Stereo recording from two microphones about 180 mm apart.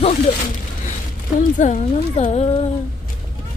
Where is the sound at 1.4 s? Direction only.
45° left (ahead or behind).